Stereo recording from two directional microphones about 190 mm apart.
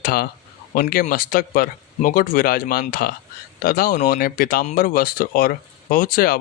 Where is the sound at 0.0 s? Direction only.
55° left (ahead or behind).